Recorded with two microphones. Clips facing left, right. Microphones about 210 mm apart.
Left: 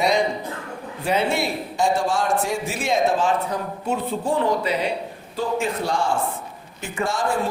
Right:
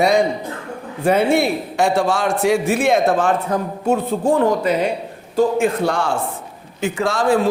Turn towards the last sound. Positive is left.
turn(degrees=-90)